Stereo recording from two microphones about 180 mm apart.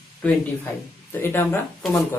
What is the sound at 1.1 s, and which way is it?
Speech, 10° left (ahead or behind).